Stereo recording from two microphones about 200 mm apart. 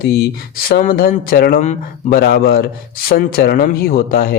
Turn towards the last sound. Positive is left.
turn(degrees=45)  # may be behind; listen again after turning